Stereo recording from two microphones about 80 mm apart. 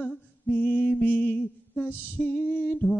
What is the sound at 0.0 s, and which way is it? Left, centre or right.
Music, centre.